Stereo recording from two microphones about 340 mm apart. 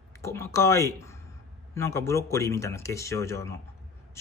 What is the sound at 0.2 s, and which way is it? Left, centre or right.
Speech, centre.